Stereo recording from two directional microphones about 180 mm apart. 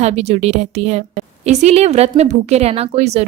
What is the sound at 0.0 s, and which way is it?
A woman's voice, 35° right (ahead or behind).